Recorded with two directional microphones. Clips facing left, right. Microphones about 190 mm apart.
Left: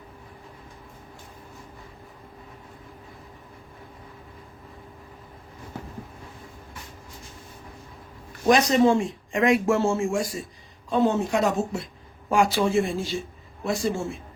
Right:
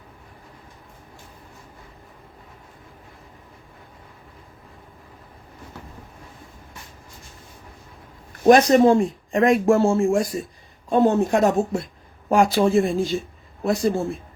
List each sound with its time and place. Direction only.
8.4 s speech: 55° right (ahead or behind); by 10.1 s 35° right (ahead or behind)
10.8 s a woman's voice: 50° right (ahead or behind)
12.3 s speech: 40° right (ahead or behind)